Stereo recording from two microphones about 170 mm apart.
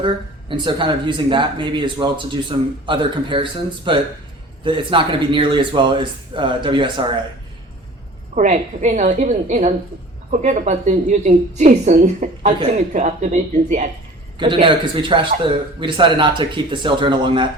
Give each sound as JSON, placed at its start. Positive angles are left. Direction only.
{"t": 0.0, "sound": "speech", "side_deg": -30}
{"t": 8.4, "sound": "a woman's voice", "side_deg": -45}
{"t": 14.3, "sound": "speech", "side_deg": -30}